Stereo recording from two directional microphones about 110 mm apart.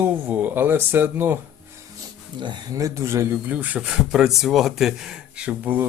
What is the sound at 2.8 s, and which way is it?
Speech, 30° right (ahead or behind).